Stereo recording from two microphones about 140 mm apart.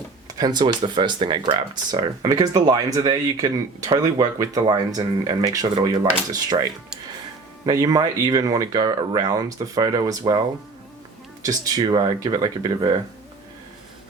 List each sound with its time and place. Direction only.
0.3 s speech: 30° right (ahead or behind)
11.4 s speech: 25° right (ahead or behind)